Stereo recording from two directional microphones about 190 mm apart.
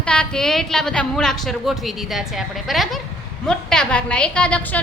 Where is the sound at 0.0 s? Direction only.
5° left (ahead or behind).